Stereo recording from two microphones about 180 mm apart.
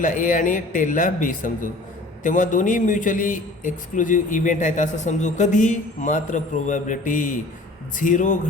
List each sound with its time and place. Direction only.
0.0 s a man's voice: 45° left (ahead or behind)